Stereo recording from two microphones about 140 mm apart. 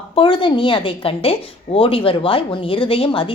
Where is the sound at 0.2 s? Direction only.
35° left (ahead or behind).